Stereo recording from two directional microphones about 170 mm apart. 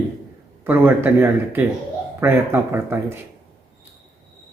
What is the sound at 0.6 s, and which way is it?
Speech, 15° right (ahead or behind).